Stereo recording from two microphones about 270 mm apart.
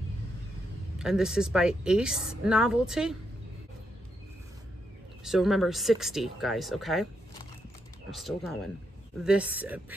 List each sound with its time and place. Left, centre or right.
0.9 s a woman's voice: centre
5.2 s a woman's voice: centre
8.1 s a woman's voice: centre